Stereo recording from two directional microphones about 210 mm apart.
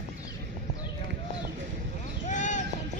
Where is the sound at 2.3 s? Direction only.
35° left (ahead or behind).